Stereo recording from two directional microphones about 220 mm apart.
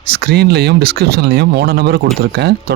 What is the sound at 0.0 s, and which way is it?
Speech, 45° right (ahead or behind).